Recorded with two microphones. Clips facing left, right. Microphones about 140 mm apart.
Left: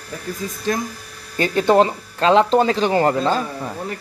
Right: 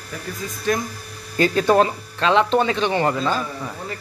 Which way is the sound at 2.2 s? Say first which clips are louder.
Left 3 dB; 35° left (ahead or behind).